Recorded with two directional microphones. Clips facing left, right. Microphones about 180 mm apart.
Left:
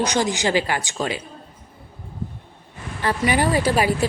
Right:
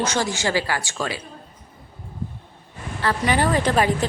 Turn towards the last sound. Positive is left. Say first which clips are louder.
# even
turn(degrees=10)  # may be behind; listen again after turning